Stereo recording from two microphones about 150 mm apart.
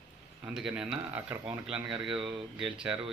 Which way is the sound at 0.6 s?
5° right (ahead or behind).